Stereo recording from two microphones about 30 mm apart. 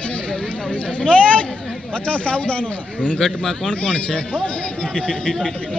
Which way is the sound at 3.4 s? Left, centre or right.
Centre.